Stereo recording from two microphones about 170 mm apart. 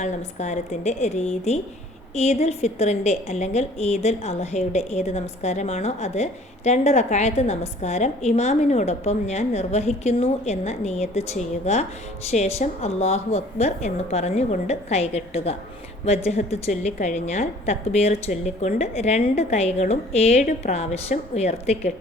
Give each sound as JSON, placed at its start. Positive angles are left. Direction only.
{"t": 0.0, "sound": "a woman's voice", "side_deg": 45}